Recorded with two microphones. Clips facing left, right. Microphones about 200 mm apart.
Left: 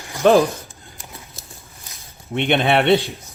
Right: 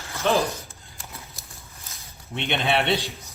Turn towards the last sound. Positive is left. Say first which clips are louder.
# left 7 dB
turn(degrees=55)  # may be behind; listen again after turning